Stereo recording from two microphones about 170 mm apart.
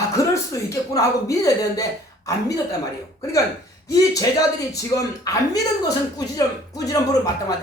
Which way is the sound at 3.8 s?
20° left (ahead or behind).